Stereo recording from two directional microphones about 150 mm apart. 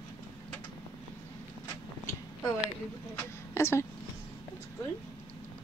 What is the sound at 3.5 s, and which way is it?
Speech, 15° left (ahead or behind).